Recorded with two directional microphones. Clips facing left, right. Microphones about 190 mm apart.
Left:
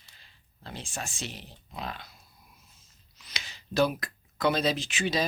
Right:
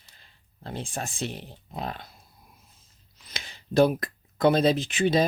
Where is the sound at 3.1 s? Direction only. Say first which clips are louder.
Right 3 dB; 55° right (ahead or behind).